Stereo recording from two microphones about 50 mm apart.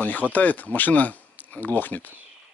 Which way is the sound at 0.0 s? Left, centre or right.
Left.